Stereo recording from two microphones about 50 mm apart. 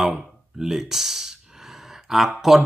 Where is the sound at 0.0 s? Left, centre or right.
Centre.